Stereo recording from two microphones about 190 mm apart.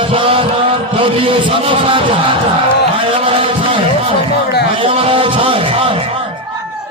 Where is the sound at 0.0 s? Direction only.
30° right (ahead or behind).